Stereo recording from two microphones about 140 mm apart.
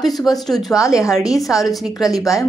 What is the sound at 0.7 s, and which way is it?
Speech, 20° left (ahead or behind).